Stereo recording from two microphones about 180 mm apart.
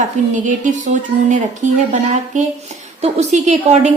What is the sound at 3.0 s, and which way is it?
Speech, 35° right (ahead or behind).